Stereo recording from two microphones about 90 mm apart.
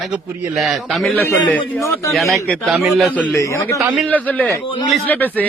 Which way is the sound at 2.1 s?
Centre (ahead or behind).